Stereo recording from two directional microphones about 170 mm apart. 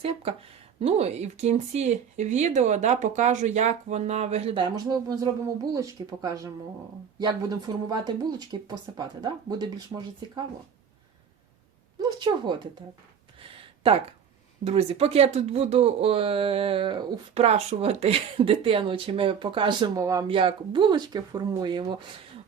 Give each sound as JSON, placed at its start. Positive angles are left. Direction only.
{"t": 0.0, "sound": "speech", "side_deg": -35}
{"t": 4.5, "sound": "speech", "side_deg": -25}
{"t": 11.9, "sound": "speech", "side_deg": -25}
{"t": 13.4, "sound": "a sound", "side_deg": -35}
{"t": 14.6, "sound": "speech", "side_deg": -35}
{"t": 20.3, "sound": "speech", "side_deg": -35}